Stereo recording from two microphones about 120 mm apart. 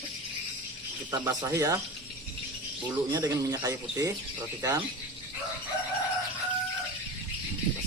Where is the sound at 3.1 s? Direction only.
35° right (ahead or behind).